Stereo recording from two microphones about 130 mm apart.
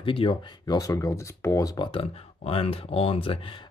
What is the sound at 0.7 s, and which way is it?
Speech, 25° left (ahead or behind).